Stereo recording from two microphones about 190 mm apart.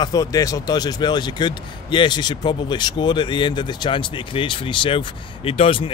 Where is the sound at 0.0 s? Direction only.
20° left (ahead or behind).